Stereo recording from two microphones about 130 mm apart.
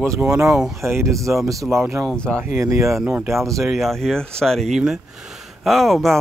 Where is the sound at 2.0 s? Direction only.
5° left (ahead or behind).